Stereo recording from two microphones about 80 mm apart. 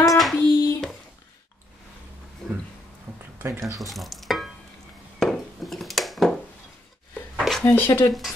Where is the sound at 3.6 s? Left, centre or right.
Right.